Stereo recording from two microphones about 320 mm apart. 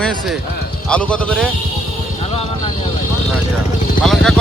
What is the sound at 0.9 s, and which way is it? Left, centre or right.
Speech, centre.